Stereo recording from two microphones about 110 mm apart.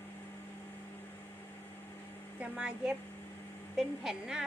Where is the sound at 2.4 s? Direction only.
10° right (ahead or behind).